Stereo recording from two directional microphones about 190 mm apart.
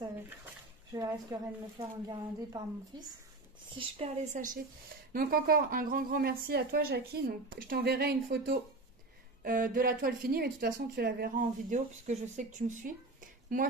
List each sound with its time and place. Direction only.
0.9 s a woman's voice: 20° right (ahead or behind); by 4.6 s 40° right (ahead or behind)
5.1 s speech: 50° right (ahead or behind)